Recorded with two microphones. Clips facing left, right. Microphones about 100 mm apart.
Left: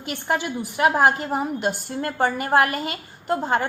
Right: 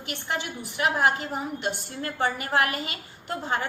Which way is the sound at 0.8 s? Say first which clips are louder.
Left 5 dB; 45° left (ahead or behind).